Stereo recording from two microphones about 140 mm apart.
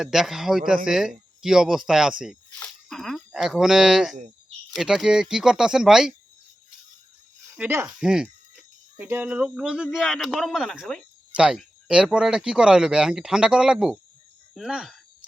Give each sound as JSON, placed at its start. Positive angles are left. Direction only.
{"t": 0.0, "sound": "speech", "side_deg": -5}
{"t": 7.5, "sound": "speech", "side_deg": -10}
{"t": 9.0, "sound": "speech", "side_deg": -15}